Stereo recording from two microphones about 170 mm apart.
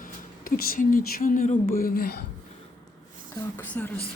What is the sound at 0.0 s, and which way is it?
Speech, 55° left (ahead or behind).